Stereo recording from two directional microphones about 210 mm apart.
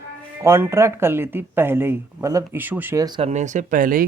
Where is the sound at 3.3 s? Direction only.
35° right (ahead or behind).